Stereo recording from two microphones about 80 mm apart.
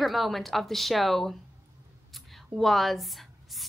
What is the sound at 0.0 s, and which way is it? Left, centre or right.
A woman's voice, centre.